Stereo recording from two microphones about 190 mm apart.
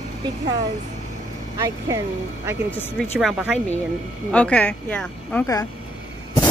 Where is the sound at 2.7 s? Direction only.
10° left (ahead or behind).